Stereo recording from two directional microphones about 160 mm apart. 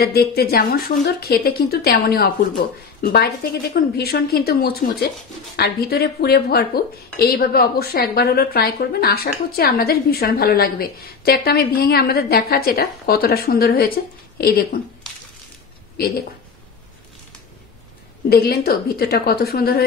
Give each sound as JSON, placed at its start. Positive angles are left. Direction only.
{"t": 0.0, "sound": "a woman's voice", "side_deg": 80}
{"t": 18.3, "sound": "a woman's voice", "side_deg": 80}